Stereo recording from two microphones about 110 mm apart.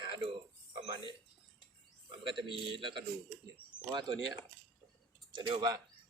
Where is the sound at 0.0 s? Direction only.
50° right (ahead or behind).